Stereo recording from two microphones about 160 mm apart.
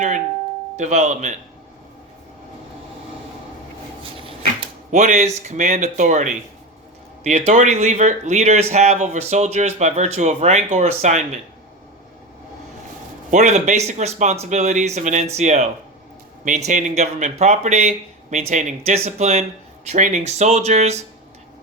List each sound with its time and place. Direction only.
0.8 s speech: 45° right (ahead or behind)
4.9 s speech: 50° right (ahead or behind)
13.3 s speech: 50° right (ahead or behind)